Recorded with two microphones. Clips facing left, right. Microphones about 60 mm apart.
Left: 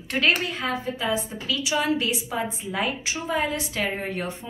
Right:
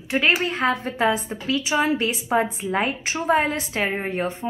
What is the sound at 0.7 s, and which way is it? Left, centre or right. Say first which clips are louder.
Speech: right 5 dB; right.